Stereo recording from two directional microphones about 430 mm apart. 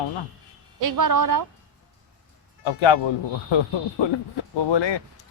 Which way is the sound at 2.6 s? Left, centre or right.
Left.